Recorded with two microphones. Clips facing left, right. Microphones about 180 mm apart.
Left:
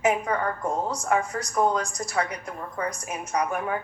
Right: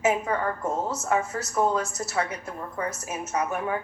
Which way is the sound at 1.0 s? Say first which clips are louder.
Left 1 dB; 25° right (ahead or behind).